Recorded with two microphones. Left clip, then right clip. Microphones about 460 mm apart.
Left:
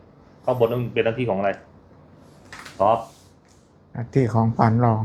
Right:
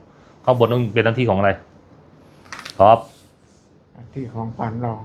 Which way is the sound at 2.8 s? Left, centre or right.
Right.